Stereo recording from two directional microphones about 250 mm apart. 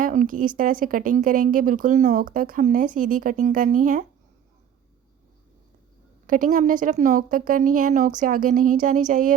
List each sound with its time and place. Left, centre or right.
0.0 s speech: right
6.2 s speech: right